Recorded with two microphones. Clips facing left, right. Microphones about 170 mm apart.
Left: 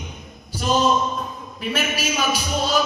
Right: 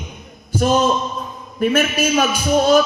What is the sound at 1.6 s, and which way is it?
Speech, 50° right (ahead or behind).